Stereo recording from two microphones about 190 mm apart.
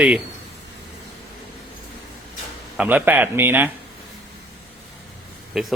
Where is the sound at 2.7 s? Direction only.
5° right (ahead or behind).